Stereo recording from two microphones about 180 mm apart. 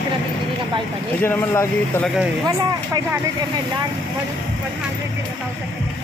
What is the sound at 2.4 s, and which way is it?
Speech, 20° right (ahead or behind).